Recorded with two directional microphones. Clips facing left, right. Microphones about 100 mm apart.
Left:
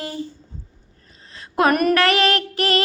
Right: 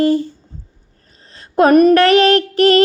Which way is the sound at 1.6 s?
30° right (ahead or behind).